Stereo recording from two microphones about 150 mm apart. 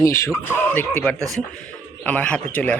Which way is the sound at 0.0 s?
20° left (ahead or behind).